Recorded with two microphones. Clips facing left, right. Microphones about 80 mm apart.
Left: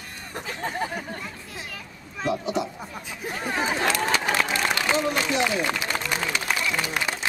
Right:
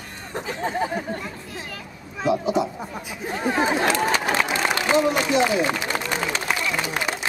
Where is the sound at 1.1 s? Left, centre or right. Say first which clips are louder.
Right 4 dB; centre.